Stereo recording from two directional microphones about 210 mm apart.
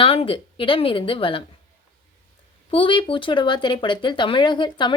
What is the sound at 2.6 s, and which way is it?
Speech, 25° left (ahead or behind).